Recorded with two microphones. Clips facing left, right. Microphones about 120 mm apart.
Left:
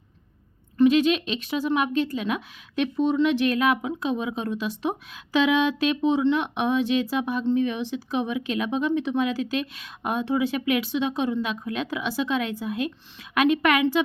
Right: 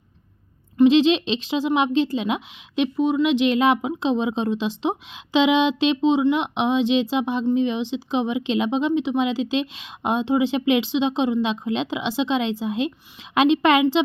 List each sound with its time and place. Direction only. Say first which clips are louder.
0.8 s a woman's voice: right 3 dB; 25° right (ahead or behind)